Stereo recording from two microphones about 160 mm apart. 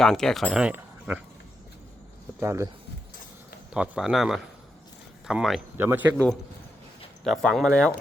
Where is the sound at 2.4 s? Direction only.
15° right (ahead or behind).